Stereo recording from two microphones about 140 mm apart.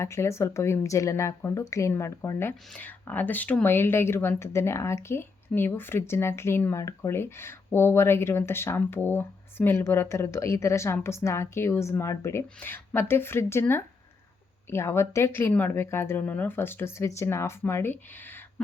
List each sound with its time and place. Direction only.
0.0 s speech: 20° left (ahead or behind)